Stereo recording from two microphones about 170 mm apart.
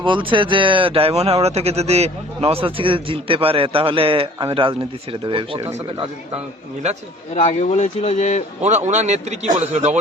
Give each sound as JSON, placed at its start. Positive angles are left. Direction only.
{"t": 0.0, "sound": "speech", "side_deg": -30}
{"t": 7.3, "sound": "a man's voice", "side_deg": 40}
{"t": 8.6, "sound": "a man's voice", "side_deg": -45}